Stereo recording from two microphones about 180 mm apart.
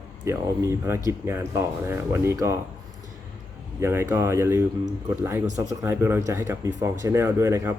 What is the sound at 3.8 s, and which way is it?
Speech, 15° right (ahead or behind).